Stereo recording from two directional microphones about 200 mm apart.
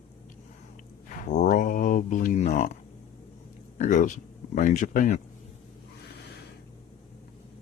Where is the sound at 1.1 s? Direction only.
40° left (ahead or behind).